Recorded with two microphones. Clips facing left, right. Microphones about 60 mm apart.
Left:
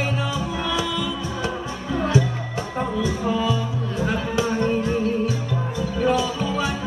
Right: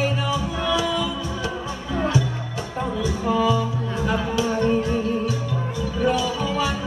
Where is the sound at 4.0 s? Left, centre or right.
Left.